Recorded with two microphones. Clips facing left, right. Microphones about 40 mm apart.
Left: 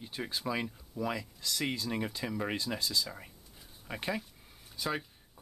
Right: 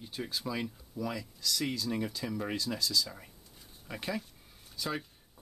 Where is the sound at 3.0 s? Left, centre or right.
Centre.